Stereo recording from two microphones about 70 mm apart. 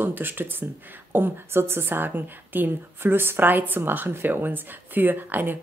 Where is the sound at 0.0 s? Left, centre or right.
Right.